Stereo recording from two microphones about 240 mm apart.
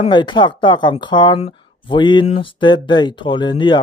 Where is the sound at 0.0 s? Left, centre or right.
Centre.